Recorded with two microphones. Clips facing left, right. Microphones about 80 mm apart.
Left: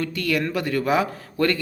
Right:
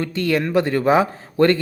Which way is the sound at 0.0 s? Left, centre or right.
Right.